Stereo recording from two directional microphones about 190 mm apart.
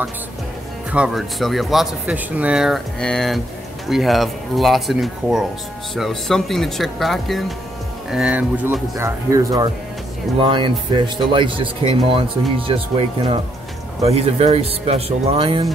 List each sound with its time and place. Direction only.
0.9 s speech: 5° right (ahead or behind); by 15.6 s 30° right (ahead or behind)